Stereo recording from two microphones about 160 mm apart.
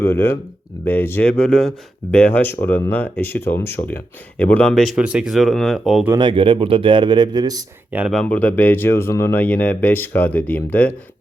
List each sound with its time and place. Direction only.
0.0 s speech: 15° left (ahead or behind); by 6.1 s centre (ahead or behind)
6.1 s speech: 30° right (ahead or behind)
7.9 s speech: 10° right (ahead or behind)
8.1 s speech: 5° left (ahead or behind)